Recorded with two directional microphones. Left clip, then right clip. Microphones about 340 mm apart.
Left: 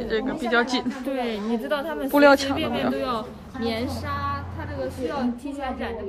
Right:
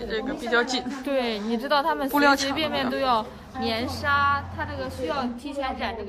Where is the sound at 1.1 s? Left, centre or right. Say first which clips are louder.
Right 3 dB; right.